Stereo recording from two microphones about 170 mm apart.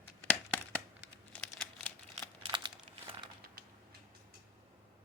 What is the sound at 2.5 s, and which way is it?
Crumpling, 25° right (ahead or behind).